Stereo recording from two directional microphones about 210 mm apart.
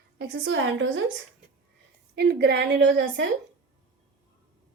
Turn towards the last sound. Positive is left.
turn(degrees=-55)  # may be behind; listen again after turning